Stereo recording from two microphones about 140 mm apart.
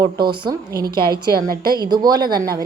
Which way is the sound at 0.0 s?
35° right (ahead or behind).